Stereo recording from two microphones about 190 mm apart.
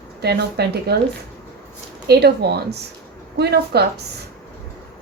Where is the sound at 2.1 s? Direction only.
60° right (ahead or behind).